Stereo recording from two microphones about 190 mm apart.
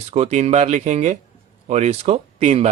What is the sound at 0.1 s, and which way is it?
Speech, 35° right (ahead or behind).